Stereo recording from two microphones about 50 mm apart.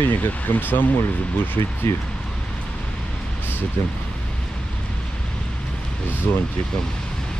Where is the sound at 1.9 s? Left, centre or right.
Left.